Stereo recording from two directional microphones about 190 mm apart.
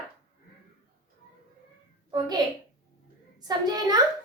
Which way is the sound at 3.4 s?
20° right (ahead or behind).